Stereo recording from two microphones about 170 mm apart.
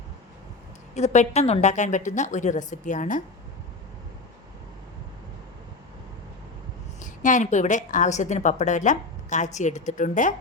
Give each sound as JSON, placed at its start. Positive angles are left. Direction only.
{"t": 0.9, "sound": "a woman's voice", "side_deg": 40}
{"t": 7.0, "sound": "a woman's voice", "side_deg": 50}